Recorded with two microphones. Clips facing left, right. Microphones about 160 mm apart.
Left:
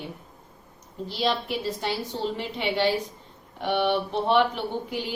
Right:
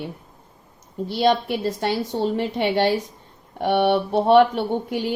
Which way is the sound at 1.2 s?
50° right (ahead or behind).